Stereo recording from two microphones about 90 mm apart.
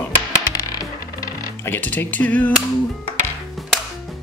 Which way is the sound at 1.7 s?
20° left (ahead or behind).